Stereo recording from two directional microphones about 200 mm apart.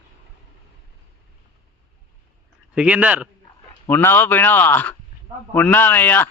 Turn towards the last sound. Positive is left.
turn(degrees=10)  # may be behind; listen again after turning